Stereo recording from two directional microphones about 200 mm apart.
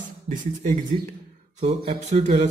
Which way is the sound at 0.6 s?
40° right (ahead or behind).